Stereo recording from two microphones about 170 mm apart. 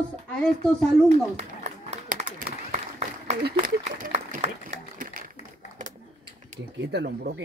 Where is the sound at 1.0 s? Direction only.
40° right (ahead or behind).